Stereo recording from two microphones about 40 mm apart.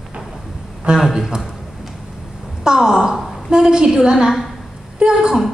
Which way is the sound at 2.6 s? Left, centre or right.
Centre.